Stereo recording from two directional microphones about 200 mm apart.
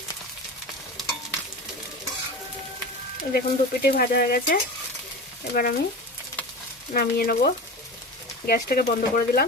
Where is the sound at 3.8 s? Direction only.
50° left (ahead or behind).